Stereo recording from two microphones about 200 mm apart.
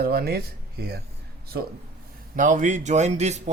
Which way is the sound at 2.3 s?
40° right (ahead or behind).